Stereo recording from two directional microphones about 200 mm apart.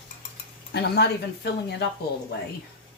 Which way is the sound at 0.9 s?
55° left (ahead or behind).